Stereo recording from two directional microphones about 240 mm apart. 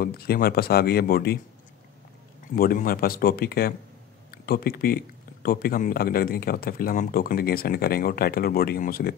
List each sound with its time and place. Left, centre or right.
0.0 s speech: left
2.5 s speech: left